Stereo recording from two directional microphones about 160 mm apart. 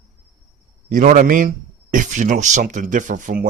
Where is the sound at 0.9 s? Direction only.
50° right (ahead or behind).